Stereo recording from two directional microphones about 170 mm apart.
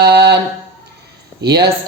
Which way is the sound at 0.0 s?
70° right (ahead or behind).